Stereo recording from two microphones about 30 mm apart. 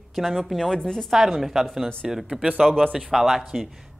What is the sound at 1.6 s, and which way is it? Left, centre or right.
Speech, centre.